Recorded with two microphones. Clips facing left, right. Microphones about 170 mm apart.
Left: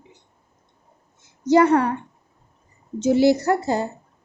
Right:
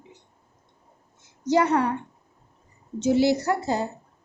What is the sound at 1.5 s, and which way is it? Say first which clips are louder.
Speech: left 5 dB; 50° left (ahead or behind).